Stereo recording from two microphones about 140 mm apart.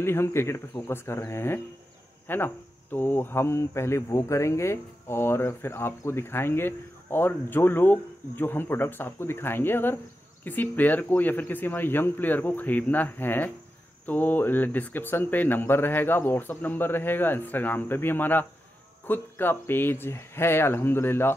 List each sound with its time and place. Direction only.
0.0 s speech: 20° left (ahead or behind)